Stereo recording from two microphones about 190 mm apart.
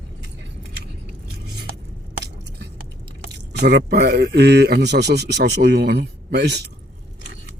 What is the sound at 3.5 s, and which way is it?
A man's voice, 60° right (ahead or behind).